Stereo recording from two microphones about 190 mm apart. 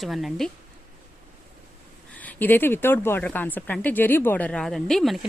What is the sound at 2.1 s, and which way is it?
A woman's voice, 10° left (ahead or behind).